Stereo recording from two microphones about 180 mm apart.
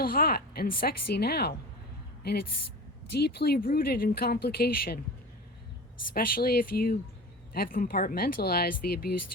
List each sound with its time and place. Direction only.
0.0 s a woman's voice: 55° left (ahead or behind)
3.1 s speech: 65° left (ahead or behind)
6.1 s speech: 55° left (ahead or behind)